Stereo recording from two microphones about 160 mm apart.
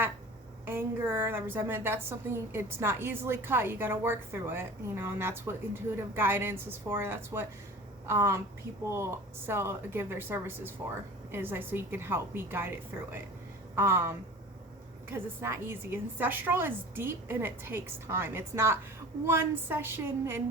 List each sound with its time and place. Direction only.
0.6 s a woman's voice: 15° right (ahead or behind)